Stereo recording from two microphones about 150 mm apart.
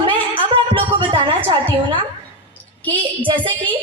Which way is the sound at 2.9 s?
35° right (ahead or behind).